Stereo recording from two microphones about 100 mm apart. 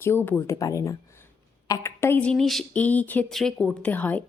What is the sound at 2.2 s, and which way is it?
Speech, 10° left (ahead or behind).